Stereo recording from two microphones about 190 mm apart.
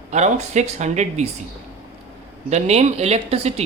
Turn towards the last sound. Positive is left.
turn(degrees=-35)  # may be behind; listen again after turning